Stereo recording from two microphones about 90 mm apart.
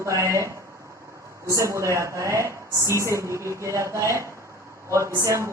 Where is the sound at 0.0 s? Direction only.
35° right (ahead or behind).